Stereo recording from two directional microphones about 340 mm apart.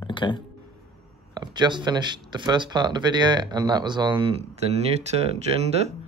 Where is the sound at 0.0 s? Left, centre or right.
Centre.